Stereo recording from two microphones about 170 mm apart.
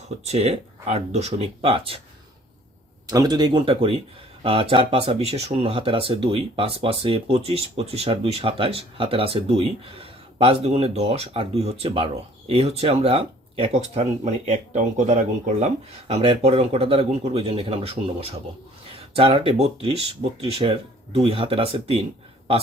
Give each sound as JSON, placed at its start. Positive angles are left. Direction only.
{"t": 0.3, "sound": "speech", "side_deg": -40}
{"t": 3.1, "sound": "speech", "side_deg": -20}